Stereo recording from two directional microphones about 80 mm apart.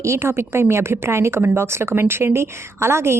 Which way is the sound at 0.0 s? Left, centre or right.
Right.